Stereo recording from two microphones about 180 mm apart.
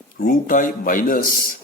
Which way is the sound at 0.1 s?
50° left (ahead or behind).